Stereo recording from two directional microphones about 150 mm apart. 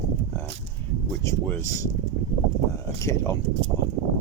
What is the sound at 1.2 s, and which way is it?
Speech, 20° left (ahead or behind).